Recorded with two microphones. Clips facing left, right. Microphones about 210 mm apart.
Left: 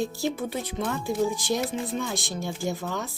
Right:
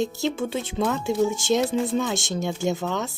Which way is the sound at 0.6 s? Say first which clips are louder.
Right 5 dB; 90° right.